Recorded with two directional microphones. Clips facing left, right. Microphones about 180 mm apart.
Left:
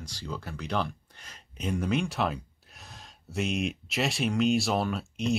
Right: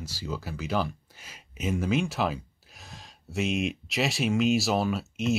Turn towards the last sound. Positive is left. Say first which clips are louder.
# right 2 dB
turn(degrees=0)  # may be behind; listen again after turning